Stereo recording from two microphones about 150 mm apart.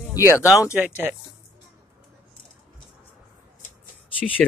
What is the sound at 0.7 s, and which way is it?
Speech, 10° right (ahead or behind).